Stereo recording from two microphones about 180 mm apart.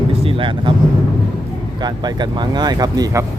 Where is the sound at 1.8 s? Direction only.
25° right (ahead or behind).